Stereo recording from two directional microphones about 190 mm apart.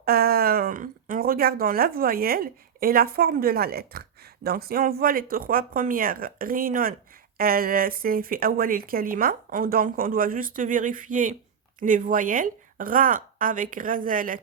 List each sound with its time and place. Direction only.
0.0 s speech: 55° right (ahead or behind)